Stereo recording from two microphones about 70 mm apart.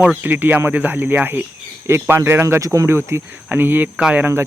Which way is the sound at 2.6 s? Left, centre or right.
Right.